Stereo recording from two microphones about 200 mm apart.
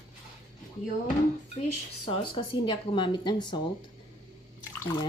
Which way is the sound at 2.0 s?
25° left (ahead or behind).